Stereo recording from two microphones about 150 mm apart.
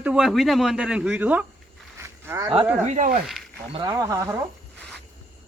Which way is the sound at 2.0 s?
15° right (ahead or behind).